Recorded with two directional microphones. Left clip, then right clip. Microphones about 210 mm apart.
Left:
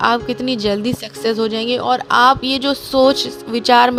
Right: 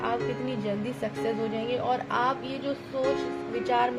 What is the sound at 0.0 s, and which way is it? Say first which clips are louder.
Speech: left 13 dB; 40° left (ahead or behind).